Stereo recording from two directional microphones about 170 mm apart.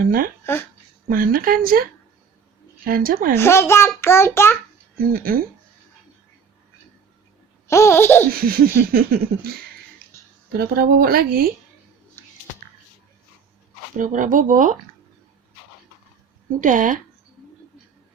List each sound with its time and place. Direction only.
0.0 s laughter: 55° right (ahead or behind)
2.8 s laughter: 55° right (ahead or behind)
3.3 s a child's voice: 15° left (ahead or behind)
4.9 s laughter: 60° right (ahead or behind)
7.7 s a child's voice: 15° left (ahead or behind)
8.3 s laughter: 60° right (ahead or behind)
10.5 s laughter: 60° right (ahead or behind)
12.2 s music: 15° left (ahead or behind)
13.9 s speech: 50° right (ahead or behind)
16.6 s speech: 50° right (ahead or behind)